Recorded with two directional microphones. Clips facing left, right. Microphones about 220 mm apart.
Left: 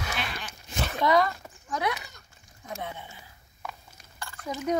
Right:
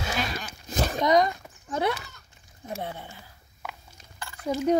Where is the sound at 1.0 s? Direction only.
20° right (ahead or behind).